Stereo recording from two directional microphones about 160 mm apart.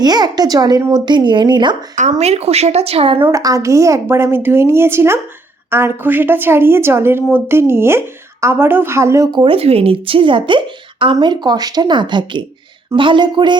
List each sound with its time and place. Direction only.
0.0 s a woman's voice: 25° right (ahead or behind)
2.0 s a woman's voice: 45° right (ahead or behind)
3.2 s speech: 20° right (ahead or behind)
9.4 s a woman's voice: 35° right (ahead or behind)